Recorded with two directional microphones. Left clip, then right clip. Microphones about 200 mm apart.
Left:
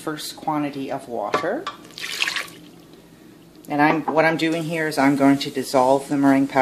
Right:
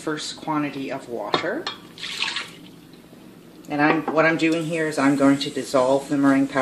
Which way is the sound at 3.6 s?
35° left (ahead or behind).